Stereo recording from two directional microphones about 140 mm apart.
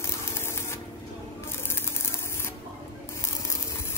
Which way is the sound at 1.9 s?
20° left (ahead or behind).